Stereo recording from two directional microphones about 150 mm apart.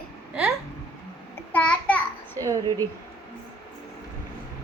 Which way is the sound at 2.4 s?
25° right (ahead or behind).